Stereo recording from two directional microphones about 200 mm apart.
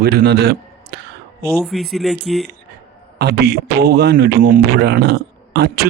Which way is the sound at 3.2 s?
55° right (ahead or behind).